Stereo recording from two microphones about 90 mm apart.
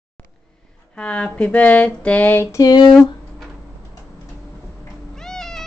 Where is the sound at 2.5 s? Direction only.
50° left (ahead or behind).